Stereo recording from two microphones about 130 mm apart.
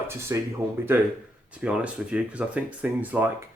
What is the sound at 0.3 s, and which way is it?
Speech, 25° right (ahead or behind).